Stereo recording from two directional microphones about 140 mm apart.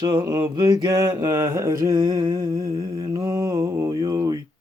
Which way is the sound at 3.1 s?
25° right (ahead or behind).